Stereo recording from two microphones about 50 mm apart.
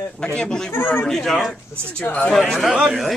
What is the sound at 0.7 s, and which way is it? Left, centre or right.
Speech, left.